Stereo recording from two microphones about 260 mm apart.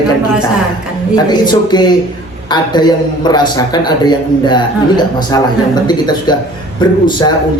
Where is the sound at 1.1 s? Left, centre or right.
Centre.